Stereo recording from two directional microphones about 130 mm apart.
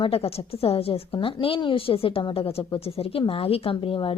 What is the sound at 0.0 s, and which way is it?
A woman's voice, 50° left (ahead or behind).